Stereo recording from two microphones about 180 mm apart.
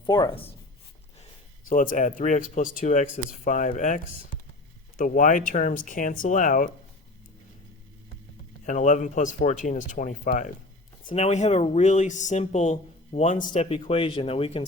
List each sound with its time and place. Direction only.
0.0 s speech: 25° left (ahead or behind)
1.7 s speech: 50° left (ahead or behind)
8.6 s speech: 45° left (ahead or behind)